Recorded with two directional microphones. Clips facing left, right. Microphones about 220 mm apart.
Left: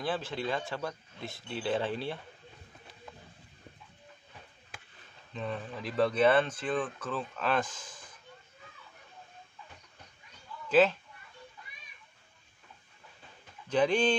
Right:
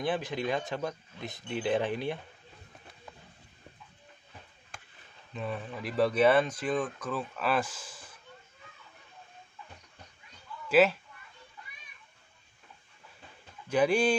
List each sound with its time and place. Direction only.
0.0 s speech: 15° right (ahead or behind)
5.3 s speech: 5° right (ahead or behind)
10.7 s speech: 10° right (ahead or behind)
13.7 s speech: 10° right (ahead or behind)